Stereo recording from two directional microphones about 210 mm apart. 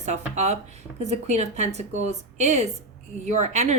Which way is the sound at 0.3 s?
30° right (ahead or behind).